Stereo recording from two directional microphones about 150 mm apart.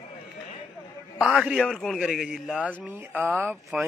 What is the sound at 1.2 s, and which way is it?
A man's voice, 5° right (ahead or behind).